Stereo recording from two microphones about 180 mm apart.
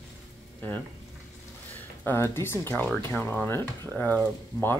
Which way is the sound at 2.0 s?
15° left (ahead or behind).